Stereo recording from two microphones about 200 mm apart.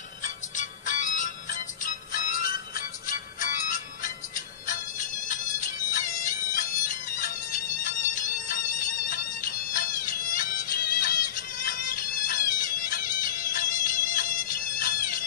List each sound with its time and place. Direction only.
0.5 s music: 40° left (ahead or behind)
4.6 s bagpipes: 40° left (ahead or behind)
7.8 s music: 40° left (ahead or behind)
13.5 s bagpipes: 40° left (ahead or behind)